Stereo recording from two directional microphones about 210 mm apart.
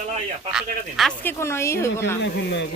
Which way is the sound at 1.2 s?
15° left (ahead or behind).